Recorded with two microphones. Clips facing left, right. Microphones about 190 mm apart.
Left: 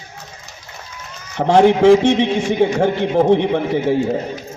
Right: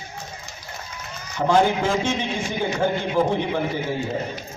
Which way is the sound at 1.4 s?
65° left (ahead or behind).